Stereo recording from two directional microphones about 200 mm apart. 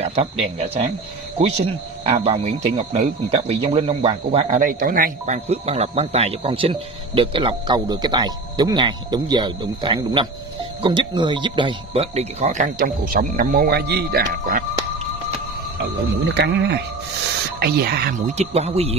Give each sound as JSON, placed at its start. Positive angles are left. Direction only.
{"t": 0.0, "sound": "speech", "side_deg": -30}
{"t": 2.0, "sound": "speech", "side_deg": -30}
{"t": 16.3, "sound": "speech", "side_deg": -60}
{"t": 18.3, "sound": "speech", "side_deg": -30}